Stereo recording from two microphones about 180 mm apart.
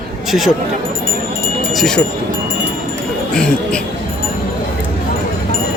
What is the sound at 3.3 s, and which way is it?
Music, 5° left (ahead or behind).